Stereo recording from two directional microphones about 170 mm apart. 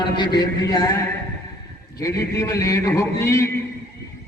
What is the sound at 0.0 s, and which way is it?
A man's voice, 25° left (ahead or behind).